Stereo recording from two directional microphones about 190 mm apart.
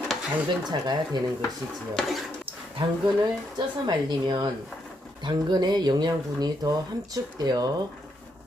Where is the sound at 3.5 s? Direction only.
25° right (ahead or behind).